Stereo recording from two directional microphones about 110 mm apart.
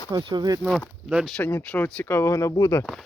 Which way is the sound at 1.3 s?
15° left (ahead or behind).